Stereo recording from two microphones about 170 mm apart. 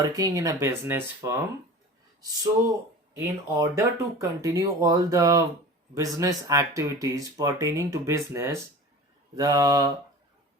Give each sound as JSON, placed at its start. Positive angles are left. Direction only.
{"t": 0.0, "sound": "speech", "side_deg": -20}
{"t": 3.2, "sound": "speech", "side_deg": -15}